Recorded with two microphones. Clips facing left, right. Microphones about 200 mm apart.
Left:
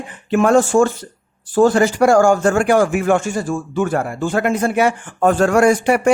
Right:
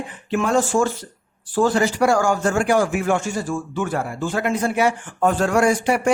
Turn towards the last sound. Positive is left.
turn(degrees=55)  # may be behind; listen again after turning